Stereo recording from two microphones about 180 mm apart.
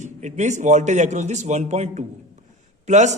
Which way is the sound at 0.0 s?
40° right (ahead or behind).